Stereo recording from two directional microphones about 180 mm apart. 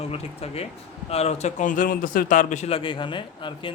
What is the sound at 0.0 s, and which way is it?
A man's voice, 35° left (ahead or behind).